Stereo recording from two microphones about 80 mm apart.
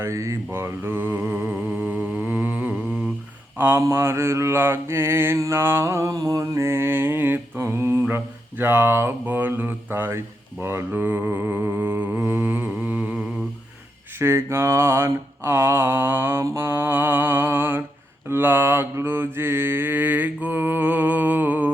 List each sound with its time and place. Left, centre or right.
0.0 s mantra: right
14.2 s mantra: right